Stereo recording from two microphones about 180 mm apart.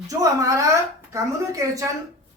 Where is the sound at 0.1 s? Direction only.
20° right (ahead or behind).